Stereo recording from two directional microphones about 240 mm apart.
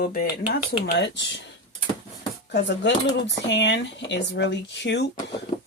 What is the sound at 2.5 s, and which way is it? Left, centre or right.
Speech, left.